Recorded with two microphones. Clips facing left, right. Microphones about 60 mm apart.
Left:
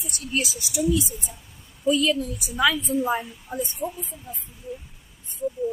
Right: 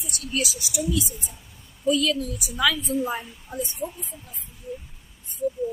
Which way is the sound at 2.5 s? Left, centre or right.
Left.